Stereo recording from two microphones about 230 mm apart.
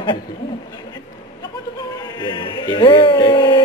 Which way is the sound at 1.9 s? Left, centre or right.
Centre.